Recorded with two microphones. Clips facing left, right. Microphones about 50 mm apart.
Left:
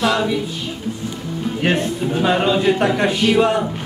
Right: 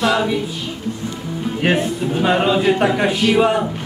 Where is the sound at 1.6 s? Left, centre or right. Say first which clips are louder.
Right 1 dB; centre.